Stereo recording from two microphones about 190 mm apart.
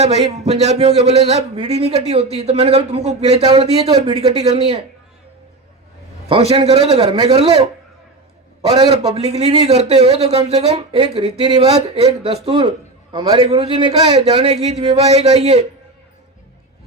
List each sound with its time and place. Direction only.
0.0 s a man's voice: 35° right (ahead or behind)
6.2 s a man's voice: 30° right (ahead or behind)
8.6 s a man's voice: 30° right (ahead or behind)